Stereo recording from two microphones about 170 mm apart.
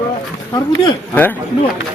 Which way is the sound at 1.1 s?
10° left (ahead or behind).